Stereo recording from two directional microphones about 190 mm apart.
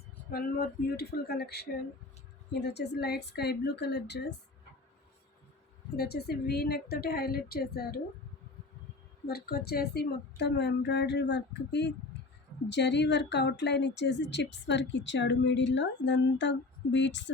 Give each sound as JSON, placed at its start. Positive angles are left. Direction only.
{"t": 0.3, "sound": "a woman's voice", "side_deg": 55}
{"t": 6.0, "sound": "a woman's voice", "side_deg": 55}
{"t": 9.2, "sound": "a woman's voice", "side_deg": 55}